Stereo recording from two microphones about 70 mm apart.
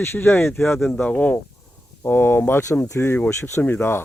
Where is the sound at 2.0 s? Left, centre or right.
Left.